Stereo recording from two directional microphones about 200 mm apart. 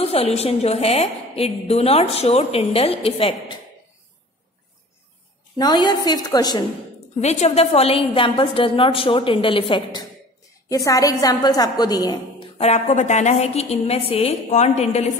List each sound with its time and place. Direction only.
0.0 s a woman's voice: 30° left (ahead or behind)
5.6 s a woman's voice: 20° left (ahead or behind)
7.2 s a woman's voice: 35° left (ahead or behind)